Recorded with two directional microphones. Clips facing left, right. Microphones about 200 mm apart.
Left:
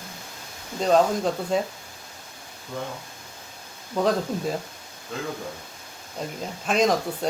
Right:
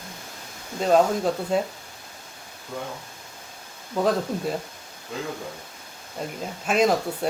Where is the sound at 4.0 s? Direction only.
Centre (ahead or behind).